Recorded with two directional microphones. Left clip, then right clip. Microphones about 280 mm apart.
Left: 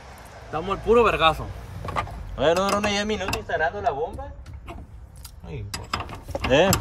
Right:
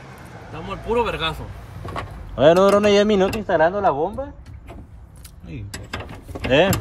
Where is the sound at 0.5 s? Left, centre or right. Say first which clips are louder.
Left 3 dB; centre.